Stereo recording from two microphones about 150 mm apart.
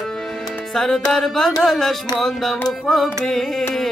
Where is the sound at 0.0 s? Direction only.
5° left (ahead or behind).